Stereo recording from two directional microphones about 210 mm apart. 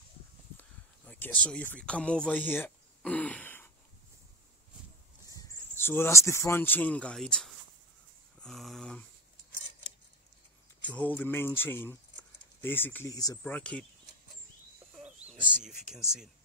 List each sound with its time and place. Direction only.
0.6 s a sound: 10° left (ahead or behind)
5.3 s speech: 15° left (ahead or behind)
8.4 s a sound: centre (ahead or behind)
10.8 s speech: 5° left (ahead or behind)
13.4 s speech: 5° left (ahead or behind)
15.0 s bird: 5° right (ahead or behind)
15.2 s bird: 35° right (ahead or behind)